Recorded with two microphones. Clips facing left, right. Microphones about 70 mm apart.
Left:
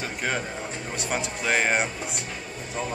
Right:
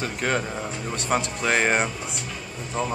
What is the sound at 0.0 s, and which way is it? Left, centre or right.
Speech, centre.